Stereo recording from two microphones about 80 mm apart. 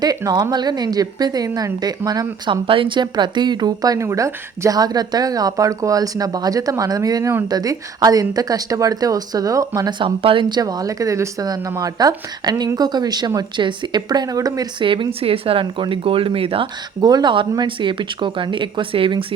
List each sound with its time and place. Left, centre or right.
0.5 s a woman's voice: right
2.5 s speech: right
4.0 s a woman's voice: right
10.0 s speech: right
10.6 s a woman's voice: right
14.8 s speech: right
17.0 s a woman's voice: right
17.7 s speech: right